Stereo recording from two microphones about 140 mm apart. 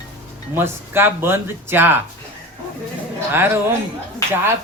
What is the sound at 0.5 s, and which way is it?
Speech, 15° right (ahead or behind).